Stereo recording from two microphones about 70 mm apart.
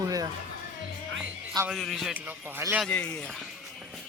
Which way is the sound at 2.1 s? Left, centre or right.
Right.